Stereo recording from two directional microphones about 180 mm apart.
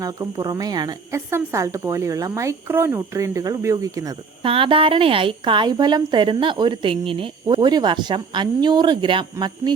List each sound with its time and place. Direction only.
0.0 s a woman's voice: 20° right (ahead or behind)
4.4 s speech: 30° right (ahead or behind)